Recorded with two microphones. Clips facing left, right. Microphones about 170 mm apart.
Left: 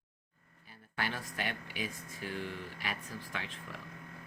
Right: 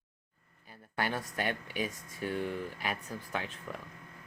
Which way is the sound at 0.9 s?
45° right (ahead or behind).